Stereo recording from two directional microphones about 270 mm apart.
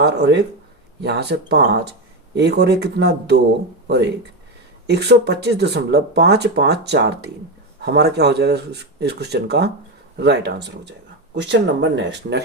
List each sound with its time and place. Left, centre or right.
0.0 s speech: right
4.9 s speech: right